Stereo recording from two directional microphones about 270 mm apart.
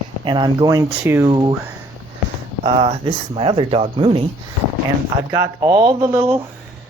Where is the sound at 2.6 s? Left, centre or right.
Centre.